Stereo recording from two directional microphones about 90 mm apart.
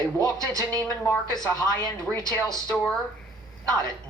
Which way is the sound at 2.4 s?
5° left (ahead or behind).